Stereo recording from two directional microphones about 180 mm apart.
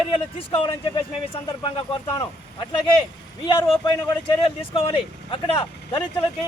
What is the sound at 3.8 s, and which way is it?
Speech, 25° left (ahead or behind).